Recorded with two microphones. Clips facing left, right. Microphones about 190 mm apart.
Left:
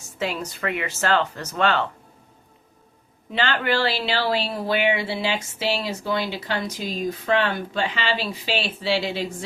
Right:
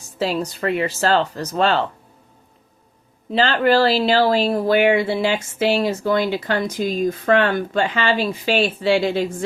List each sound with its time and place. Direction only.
0.2 s speech: 35° right (ahead or behind)
3.3 s speech: 35° right (ahead or behind)